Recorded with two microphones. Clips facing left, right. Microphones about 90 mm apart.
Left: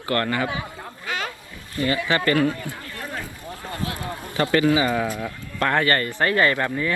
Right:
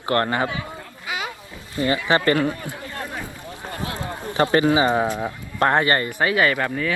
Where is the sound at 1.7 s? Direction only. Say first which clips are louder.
Right 2 dB; 25° right (ahead or behind).